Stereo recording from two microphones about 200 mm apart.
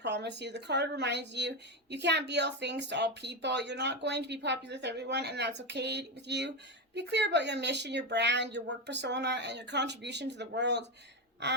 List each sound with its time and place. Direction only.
0.0 s a woman's voice: 60° right (ahead or behind)